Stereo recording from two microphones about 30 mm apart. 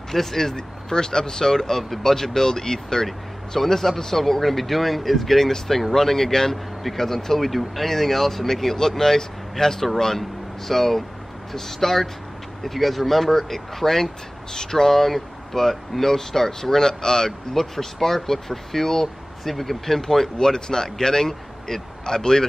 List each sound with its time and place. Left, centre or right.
0.1 s speech: centre
0.6 s speech: left
20.3 s speech: left